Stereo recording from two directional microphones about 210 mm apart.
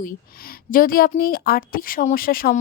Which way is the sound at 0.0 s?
45° left (ahead or behind).